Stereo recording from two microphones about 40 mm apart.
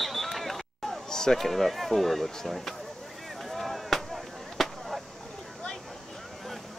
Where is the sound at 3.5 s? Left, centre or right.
Centre.